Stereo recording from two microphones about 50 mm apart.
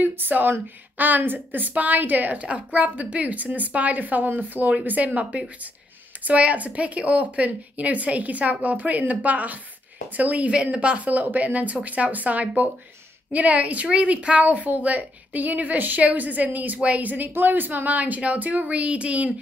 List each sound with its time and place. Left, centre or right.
0.0 s a woman's voice: right